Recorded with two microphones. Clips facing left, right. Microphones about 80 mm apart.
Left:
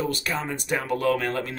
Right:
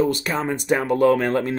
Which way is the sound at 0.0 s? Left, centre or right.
Right.